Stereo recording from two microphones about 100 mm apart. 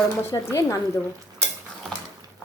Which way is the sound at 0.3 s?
35° left (ahead or behind).